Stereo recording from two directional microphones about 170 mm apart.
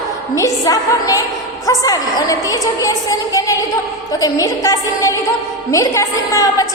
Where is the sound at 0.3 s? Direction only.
20° left (ahead or behind).